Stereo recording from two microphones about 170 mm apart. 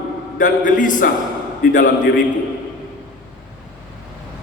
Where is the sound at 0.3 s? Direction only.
50° left (ahead or behind).